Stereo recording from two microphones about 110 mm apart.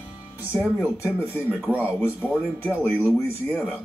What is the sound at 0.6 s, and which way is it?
Speech, 15° right (ahead or behind).